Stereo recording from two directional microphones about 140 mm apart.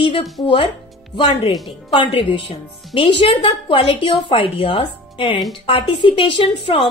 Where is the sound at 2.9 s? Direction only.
40° left (ahead or behind).